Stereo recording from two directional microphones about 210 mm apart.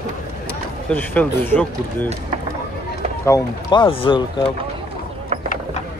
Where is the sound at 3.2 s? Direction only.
20° left (ahead or behind).